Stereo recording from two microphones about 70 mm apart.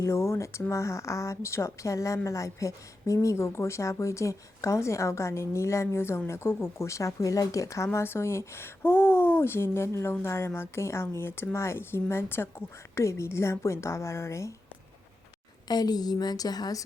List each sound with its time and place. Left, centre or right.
0.0 s a woman's voice: left
7.9 s speech: left
15.6 s a woman's voice: left